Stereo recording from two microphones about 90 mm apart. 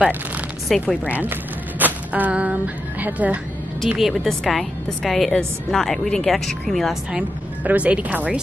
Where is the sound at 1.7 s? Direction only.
20° right (ahead or behind).